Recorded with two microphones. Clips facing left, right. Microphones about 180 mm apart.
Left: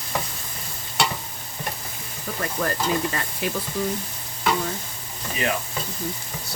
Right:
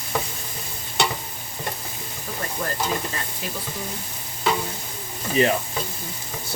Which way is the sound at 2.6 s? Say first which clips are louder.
Left 4 dB; 90° left.